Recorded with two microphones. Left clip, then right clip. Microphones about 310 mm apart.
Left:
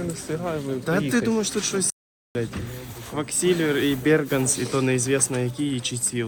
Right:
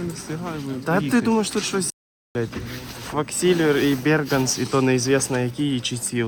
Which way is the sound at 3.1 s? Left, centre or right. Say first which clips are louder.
Right 3 dB; right.